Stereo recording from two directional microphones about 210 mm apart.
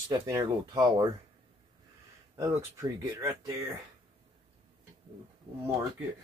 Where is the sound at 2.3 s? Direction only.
15° right (ahead or behind).